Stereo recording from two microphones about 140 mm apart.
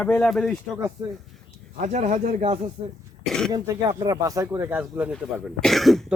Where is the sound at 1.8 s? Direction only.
60° right (ahead or behind).